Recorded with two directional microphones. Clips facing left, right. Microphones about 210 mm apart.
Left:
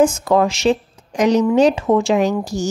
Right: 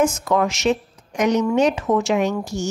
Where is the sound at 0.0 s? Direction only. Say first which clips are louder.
Left 4 dB; 30° left (ahead or behind).